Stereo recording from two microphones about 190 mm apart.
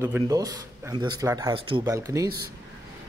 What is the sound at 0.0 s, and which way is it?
Speech, 15° right (ahead or behind).